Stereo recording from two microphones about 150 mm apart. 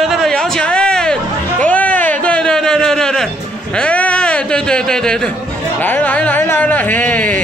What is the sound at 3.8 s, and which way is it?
Speech, 10° left (ahead or behind).